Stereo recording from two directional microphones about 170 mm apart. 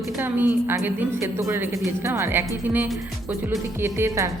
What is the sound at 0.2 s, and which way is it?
A woman's voice, 10° right (ahead or behind).